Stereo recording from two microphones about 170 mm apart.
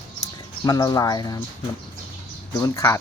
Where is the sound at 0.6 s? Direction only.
20° left (ahead or behind).